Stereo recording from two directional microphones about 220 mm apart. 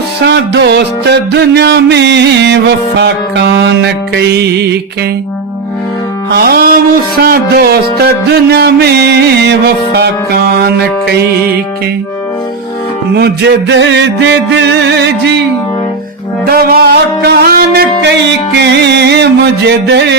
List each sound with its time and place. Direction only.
0.2 s music: 50° right (ahead or behind)
6.3 s music: 45° right (ahead or behind)
13.1 s music: 50° right (ahead or behind)
16.5 s music: 45° right (ahead or behind)